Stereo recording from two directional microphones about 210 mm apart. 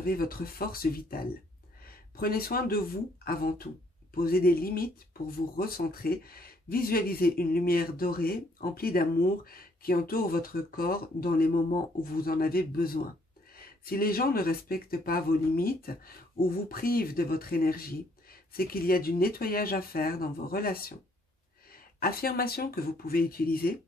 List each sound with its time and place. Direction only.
0.0 s speech: 45° left (ahead or behind)
22.0 s speech: 45° left (ahead or behind)